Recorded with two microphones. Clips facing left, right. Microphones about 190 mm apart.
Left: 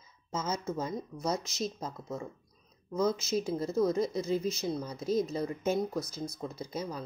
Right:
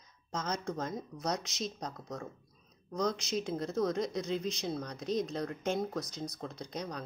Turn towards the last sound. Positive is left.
turn(degrees=5)  # may be behind; listen again after turning